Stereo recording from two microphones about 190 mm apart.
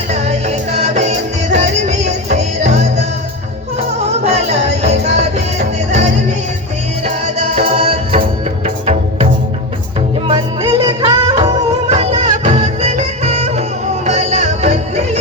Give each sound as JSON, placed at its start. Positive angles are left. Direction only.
{"t": 0.1, "sound": "music", "side_deg": -35}
{"t": 4.8, "sound": "music", "side_deg": -35}
{"t": 7.3, "sound": "music", "side_deg": -35}
{"t": 10.2, "sound": "music", "side_deg": -25}